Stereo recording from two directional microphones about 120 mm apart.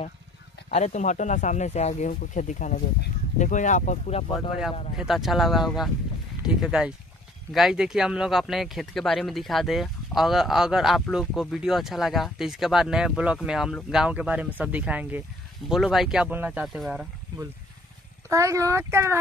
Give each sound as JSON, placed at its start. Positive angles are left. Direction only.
{"t": 0.7, "sound": "speech", "side_deg": 70}
{"t": 4.9, "sound": "speech", "side_deg": -5}
{"t": 15.7, "sound": "speech", "side_deg": 0}
{"t": 16.6, "sound": "speech", "side_deg": 0}
{"t": 18.3, "sound": "speech", "side_deg": -25}